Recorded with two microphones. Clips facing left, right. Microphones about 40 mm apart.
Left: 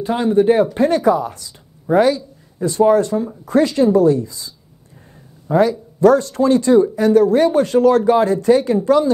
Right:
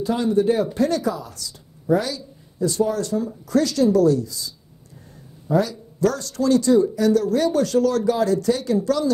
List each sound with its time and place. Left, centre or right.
0.0 s a woman's voice: left